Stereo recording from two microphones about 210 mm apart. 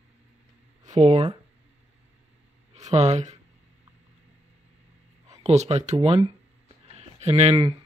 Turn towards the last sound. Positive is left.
turn(degrees=-25)  # may be behind; listen again after turning